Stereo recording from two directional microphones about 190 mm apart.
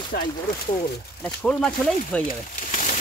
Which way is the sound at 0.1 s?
55° left (ahead or behind).